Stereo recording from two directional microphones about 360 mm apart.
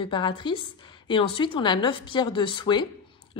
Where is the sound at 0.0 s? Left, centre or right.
Centre.